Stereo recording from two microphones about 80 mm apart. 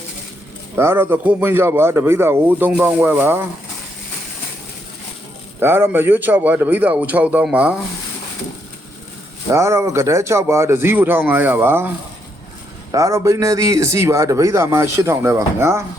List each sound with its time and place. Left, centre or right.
0.8 s speech: right
5.5 s speech: right
9.5 s speech: right
12.9 s speech: right